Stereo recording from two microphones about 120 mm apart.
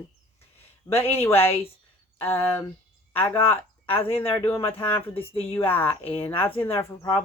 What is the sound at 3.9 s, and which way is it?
Speech, 50° left (ahead or behind).